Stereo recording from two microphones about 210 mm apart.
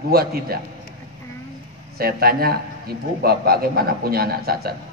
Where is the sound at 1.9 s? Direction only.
45° right (ahead or behind).